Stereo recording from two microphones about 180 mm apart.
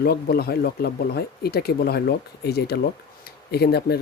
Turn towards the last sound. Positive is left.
turn(degrees=65)  # may be behind; listen again after turning